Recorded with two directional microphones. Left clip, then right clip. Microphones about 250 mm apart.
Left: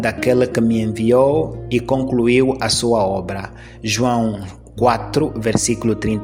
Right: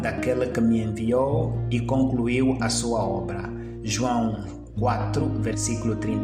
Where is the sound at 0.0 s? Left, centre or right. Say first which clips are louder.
Left 8 dB; left.